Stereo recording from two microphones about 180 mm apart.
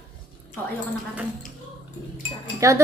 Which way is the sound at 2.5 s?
15° right (ahead or behind).